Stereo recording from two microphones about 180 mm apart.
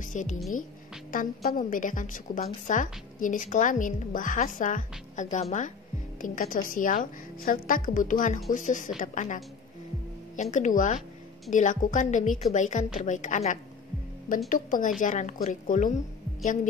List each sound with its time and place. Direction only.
0.0 s a woman's voice: 45° left (ahead or behind)